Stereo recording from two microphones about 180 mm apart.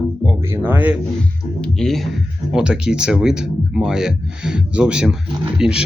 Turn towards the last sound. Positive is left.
turn(degrees=-5)  # may be behind; listen again after turning